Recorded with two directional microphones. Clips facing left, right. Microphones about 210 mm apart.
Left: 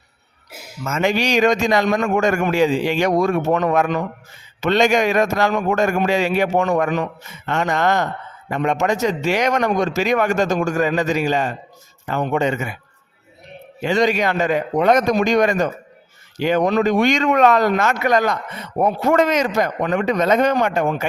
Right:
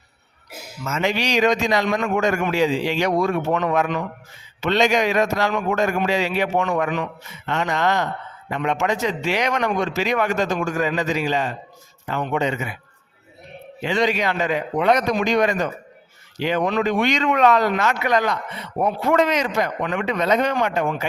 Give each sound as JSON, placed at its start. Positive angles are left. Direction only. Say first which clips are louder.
{"t": 0.9, "sound": "speech", "louder": "left 3 dB", "side_deg": 50}
{"t": 13.8, "sound": "speech", "louder": "left 3 dB", "side_deg": 45}